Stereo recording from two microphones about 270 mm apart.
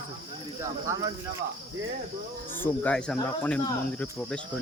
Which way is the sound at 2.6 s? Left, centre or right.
Centre.